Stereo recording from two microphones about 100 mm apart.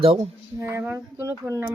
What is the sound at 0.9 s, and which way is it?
Speech, 25° right (ahead or behind).